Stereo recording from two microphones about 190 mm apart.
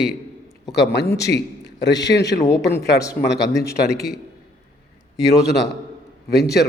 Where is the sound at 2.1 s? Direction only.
65° left (ahead or behind).